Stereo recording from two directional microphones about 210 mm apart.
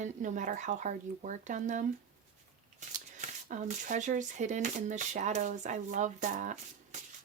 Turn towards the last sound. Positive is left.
turn(degrees=-35)  # may be behind; listen again after turning